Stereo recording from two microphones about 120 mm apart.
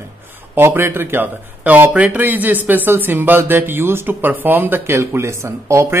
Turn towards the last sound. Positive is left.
turn(degrees=-25)  # may be behind; listen again after turning